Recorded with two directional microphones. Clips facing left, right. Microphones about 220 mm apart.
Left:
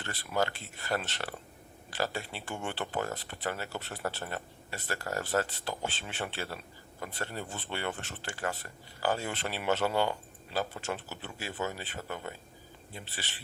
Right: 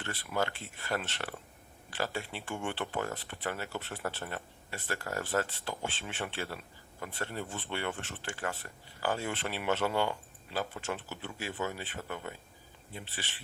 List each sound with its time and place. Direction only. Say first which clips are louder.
0.0 s speech: left 2 dB; 35° left (ahead or behind)